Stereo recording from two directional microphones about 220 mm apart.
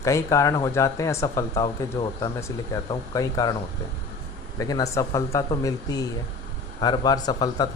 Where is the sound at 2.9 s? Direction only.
15° left (ahead or behind).